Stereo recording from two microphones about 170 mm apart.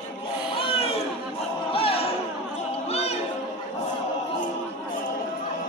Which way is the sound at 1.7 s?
35° left (ahead or behind).